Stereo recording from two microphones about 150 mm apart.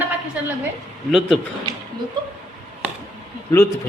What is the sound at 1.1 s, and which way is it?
Speech, centre (ahead or behind).